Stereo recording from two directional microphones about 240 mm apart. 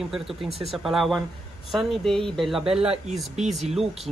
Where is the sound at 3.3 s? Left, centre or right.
Right.